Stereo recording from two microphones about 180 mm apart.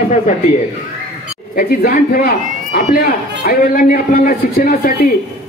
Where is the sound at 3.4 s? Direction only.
50° left (ahead or behind).